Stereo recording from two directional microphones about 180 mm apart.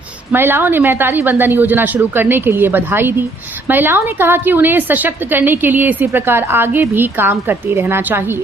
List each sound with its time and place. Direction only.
0.3 s a woman's voice: 10° right (ahead or behind)